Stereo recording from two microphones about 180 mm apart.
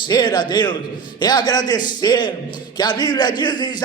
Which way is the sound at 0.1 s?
25° left (ahead or behind).